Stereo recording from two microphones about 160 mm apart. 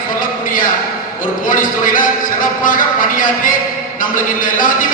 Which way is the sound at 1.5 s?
60° left (ahead or behind).